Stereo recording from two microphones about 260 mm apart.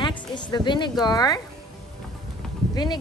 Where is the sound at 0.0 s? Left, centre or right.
Centre.